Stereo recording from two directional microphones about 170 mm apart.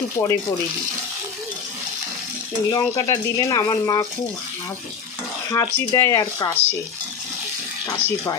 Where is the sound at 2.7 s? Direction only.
20° left (ahead or behind).